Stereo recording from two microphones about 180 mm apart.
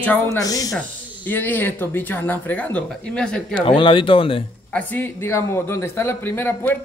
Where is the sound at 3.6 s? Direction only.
30° left (ahead or behind).